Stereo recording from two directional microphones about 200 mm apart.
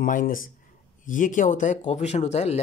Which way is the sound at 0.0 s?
45° left (ahead or behind).